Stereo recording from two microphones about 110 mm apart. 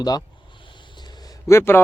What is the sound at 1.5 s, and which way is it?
Speech, 20° left (ahead or behind).